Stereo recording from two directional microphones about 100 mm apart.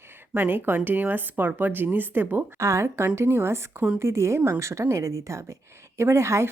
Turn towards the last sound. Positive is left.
turn(degrees=-30)  # may be behind; listen again after turning